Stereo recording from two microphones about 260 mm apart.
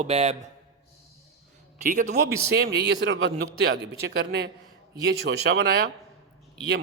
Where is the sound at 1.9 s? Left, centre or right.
Right.